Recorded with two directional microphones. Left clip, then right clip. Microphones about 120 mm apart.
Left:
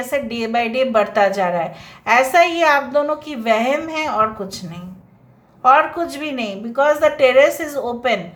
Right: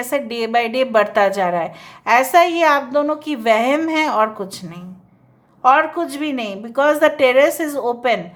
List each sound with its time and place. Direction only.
0.0 s a woman's voice: 40° right (ahead or behind)
3.3 s a woman's voice: 45° right (ahead or behind)
4.4 s a woman's voice: 35° right (ahead or behind)
6.7 s a woman's voice: 55° right (ahead or behind)
7.2 s a woman's voice: 35° right (ahead or behind)